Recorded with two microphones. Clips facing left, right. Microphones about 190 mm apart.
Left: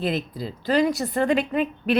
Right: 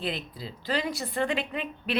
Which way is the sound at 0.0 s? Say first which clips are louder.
Left 8 dB; 45° left (ahead or behind).